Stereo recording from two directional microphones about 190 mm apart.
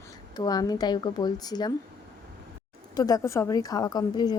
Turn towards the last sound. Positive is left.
turn(degrees=20)  # may be behind; listen again after turning